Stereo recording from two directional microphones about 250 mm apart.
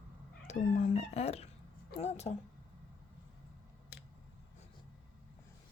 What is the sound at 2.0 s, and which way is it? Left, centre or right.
Speech, left.